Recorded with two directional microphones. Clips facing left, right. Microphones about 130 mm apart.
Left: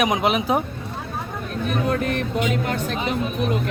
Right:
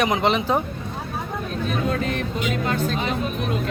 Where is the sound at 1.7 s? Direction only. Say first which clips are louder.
Left 2 dB; 60° left (ahead or behind).